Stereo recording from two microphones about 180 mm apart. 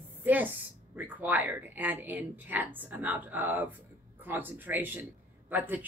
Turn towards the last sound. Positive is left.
turn(degrees=-10)  # may be behind; listen again after turning